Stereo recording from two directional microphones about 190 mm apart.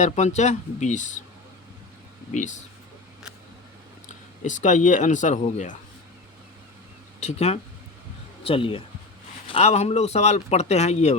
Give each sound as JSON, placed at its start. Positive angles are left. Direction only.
{"t": 0.0, "sound": "speech", "side_deg": 35}
{"t": 2.3, "sound": "speech", "side_deg": 40}
{"t": 4.4, "sound": "speech", "side_deg": 40}
{"t": 7.2, "sound": "speech", "side_deg": 35}